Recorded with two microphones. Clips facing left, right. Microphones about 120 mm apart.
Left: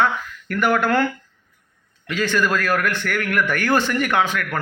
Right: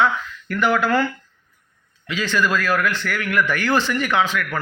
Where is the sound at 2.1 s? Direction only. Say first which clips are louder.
Left 1 dB; 50° left (ahead or behind).